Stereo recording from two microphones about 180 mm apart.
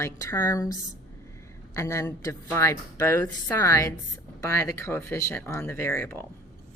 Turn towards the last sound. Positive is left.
turn(degrees=15)  # may be behind; listen again after turning